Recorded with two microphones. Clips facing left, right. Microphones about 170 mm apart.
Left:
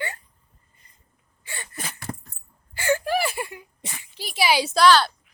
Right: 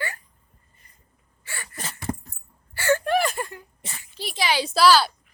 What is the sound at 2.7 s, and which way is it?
Whimper, 15° left (ahead or behind).